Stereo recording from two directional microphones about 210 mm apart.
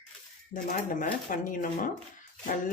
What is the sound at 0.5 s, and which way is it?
Speech, 40° left (ahead or behind).